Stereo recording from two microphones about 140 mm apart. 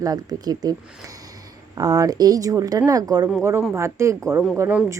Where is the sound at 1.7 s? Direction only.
25° right (ahead or behind).